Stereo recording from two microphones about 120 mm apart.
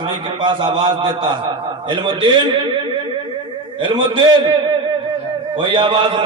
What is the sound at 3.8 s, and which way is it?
Speech, 40° right (ahead or behind).